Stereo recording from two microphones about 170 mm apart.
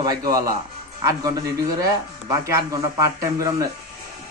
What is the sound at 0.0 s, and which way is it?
Speech, 20° right (ahead or behind).